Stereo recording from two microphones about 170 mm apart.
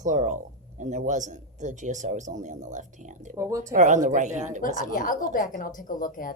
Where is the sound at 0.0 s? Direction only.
45° right (ahead or behind).